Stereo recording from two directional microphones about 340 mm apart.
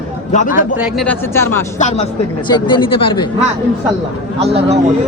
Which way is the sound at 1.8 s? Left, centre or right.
Left.